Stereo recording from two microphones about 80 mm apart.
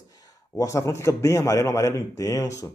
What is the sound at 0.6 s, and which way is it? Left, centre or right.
A man's voice, left.